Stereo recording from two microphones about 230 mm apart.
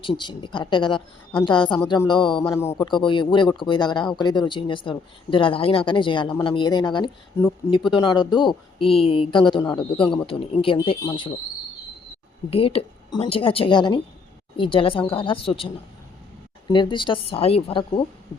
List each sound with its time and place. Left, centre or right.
0.2 s speech: centre
12.5 s speech: left